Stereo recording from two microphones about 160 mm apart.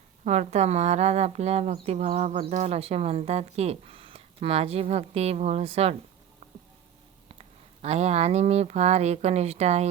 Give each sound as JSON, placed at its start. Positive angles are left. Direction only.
{"t": 0.3, "sound": "speech", "side_deg": -45}
{"t": 7.3, "sound": "speech", "side_deg": -40}